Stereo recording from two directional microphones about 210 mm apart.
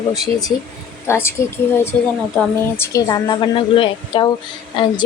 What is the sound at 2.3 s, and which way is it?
A woman's voice, 15° left (ahead or behind).